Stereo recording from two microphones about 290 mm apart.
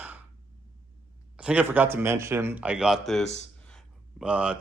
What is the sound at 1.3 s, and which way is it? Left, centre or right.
A man's voice, centre.